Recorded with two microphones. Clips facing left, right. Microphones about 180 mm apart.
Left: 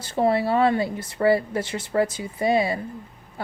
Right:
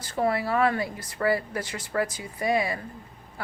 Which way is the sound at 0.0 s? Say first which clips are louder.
Left 5 dB; 25° left (ahead or behind).